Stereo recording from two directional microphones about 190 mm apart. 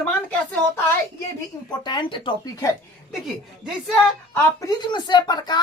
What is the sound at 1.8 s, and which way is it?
Speech, 25° left (ahead or behind).